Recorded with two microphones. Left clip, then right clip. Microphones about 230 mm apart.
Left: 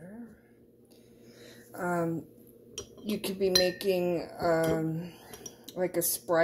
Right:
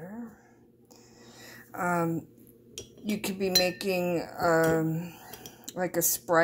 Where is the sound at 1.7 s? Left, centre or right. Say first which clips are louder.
Right 3 dB; right.